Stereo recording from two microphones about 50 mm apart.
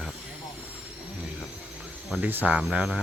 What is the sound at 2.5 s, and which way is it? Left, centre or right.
Speech, right.